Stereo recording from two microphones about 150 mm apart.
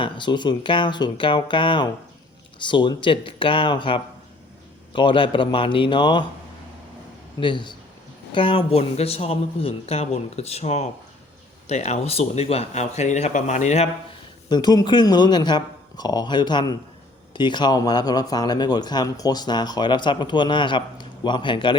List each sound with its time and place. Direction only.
0.0 s speech: 30° left (ahead or behind)
7.3 s speech: 35° left (ahead or behind); by 13.8 s 50° left (ahead or behind)
14.5 s speech: 25° left (ahead or behind)